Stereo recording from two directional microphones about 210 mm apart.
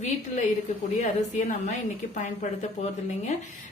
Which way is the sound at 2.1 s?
35° left (ahead or behind).